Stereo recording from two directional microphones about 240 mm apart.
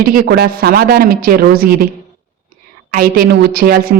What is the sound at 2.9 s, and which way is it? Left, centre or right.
Speech, right.